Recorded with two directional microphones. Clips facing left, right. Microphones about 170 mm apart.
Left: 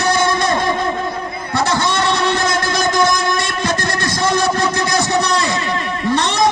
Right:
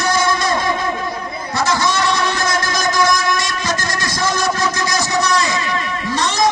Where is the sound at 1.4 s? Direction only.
60° left (ahead or behind).